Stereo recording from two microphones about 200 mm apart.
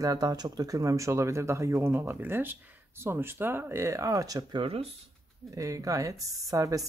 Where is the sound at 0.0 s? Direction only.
20° right (ahead or behind).